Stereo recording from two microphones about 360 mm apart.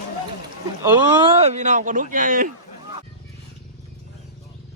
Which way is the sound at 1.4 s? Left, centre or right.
Centre.